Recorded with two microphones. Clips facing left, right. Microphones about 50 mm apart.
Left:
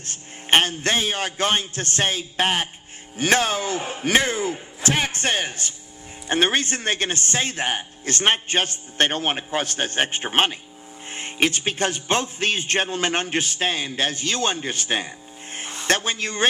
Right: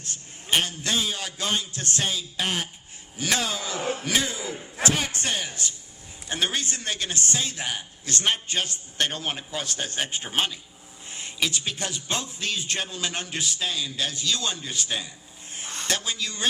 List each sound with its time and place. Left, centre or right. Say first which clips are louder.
0.0 s a man's voice: left 4 dB; left
3.8 s a man's voice: right 1 dB; left
4.0 s a man's voice: left 7 dB; left